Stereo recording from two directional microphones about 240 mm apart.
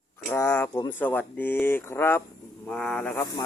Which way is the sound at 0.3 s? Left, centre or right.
Centre.